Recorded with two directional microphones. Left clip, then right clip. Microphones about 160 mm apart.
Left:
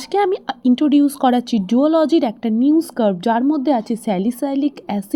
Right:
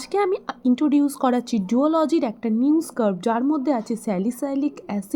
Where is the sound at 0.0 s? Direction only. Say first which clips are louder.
Left 4 dB; 15° left (ahead or behind).